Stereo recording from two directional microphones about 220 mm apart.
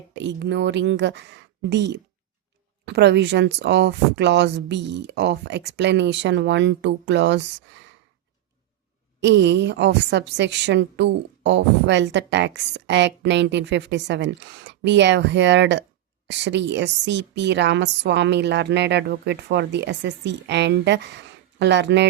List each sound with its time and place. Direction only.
0.1 s a woman's voice: 55° right (ahead or behind)
9.2 s a woman's voice: 50° right (ahead or behind)